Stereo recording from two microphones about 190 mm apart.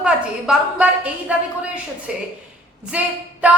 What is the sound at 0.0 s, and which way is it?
A woman's voice, 5° right (ahead or behind).